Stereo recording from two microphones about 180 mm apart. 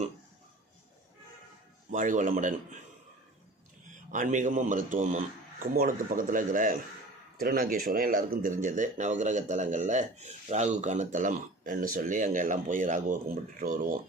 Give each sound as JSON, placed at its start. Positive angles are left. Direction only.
{"t": 1.9, "sound": "speech", "side_deg": -45}
{"t": 4.1, "sound": "speech", "side_deg": -45}